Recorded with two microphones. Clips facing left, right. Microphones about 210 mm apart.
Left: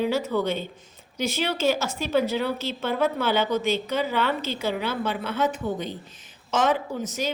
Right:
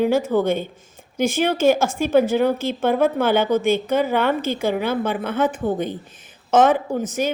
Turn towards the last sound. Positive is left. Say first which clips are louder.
# right 6 dB
turn(degrees=-50)  # may be behind; listen again after turning